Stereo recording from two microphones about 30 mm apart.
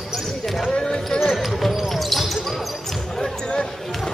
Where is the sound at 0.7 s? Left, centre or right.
Left.